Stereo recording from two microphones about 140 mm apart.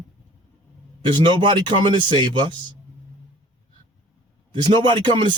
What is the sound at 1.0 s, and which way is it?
Speech, 35° right (ahead or behind).